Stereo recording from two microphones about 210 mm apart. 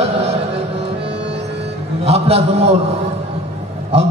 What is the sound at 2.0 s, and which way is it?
Speech, 30° right (ahead or behind).